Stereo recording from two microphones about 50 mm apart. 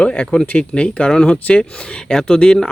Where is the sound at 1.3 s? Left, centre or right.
Left.